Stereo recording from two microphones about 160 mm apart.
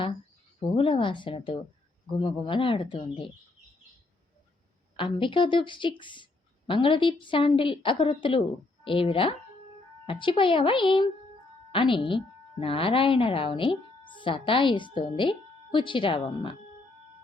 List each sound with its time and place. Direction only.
0.8 s speech: 35° left (ahead or behind)
4.9 s speech: 30° left (ahead or behind)